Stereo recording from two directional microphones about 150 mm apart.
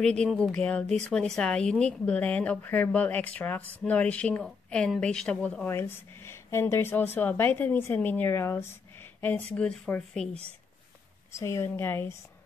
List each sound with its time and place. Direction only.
0.0 s a woman's voice: 5° left (ahead or behind)
11.3 s a woman's voice: 20° left (ahead or behind)